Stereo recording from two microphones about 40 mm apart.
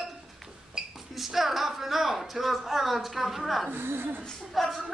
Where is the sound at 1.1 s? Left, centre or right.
Centre.